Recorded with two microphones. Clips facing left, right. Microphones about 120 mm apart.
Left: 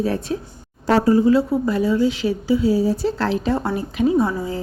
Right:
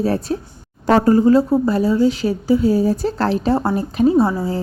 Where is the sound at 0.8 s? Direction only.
50° right (ahead or behind).